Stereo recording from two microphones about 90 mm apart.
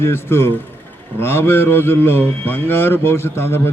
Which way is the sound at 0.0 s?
25° left (ahead or behind).